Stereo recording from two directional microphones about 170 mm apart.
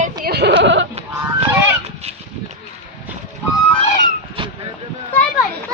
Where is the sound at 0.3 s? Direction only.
75° right (ahead or behind).